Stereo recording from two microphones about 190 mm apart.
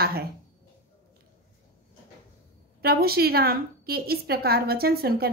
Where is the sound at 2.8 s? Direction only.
55° right (ahead or behind).